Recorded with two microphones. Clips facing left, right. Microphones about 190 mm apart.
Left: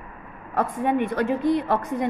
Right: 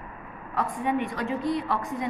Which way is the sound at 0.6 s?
55° left (ahead or behind).